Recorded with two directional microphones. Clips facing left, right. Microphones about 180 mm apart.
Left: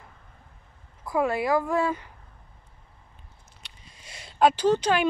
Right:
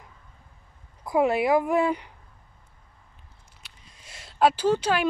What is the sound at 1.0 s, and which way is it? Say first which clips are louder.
Speech: right 3 dB; 20° right (ahead or behind).